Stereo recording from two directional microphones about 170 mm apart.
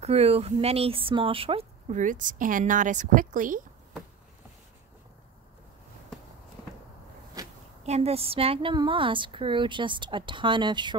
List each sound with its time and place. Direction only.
0.0 s speech: 35° right (ahead or behind)
7.8 s a woman's voice: 40° right (ahead or behind)